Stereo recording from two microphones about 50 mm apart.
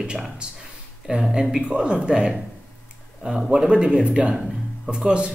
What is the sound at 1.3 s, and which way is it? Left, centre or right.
Speech, centre.